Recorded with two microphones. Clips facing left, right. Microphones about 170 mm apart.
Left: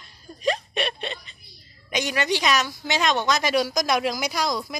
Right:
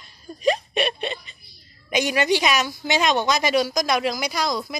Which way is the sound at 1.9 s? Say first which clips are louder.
Right 4 dB; 10° right (ahead or behind).